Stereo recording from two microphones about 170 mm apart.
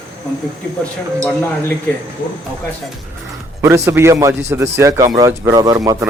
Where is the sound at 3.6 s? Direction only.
15° right (ahead or behind).